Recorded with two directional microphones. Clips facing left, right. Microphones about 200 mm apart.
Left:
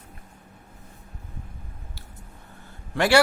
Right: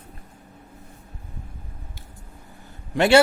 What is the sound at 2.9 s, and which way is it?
Speech, 20° right (ahead or behind).